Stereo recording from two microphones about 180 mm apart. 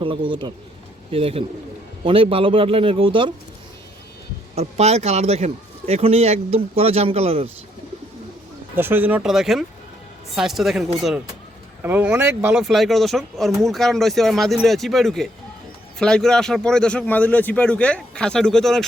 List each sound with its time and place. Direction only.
0.0 s a man's voice: 30° right (ahead or behind)
4.5 s a man's voice: 35° right (ahead or behind)
8.7 s speech: 10° right (ahead or behind)